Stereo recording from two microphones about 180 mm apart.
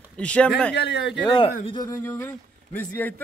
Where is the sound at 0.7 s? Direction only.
75° left (ahead or behind).